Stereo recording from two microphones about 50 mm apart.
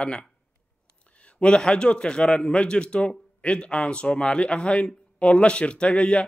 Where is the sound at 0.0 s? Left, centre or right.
Centre.